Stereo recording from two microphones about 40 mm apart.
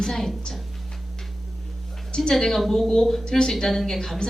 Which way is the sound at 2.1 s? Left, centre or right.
Left.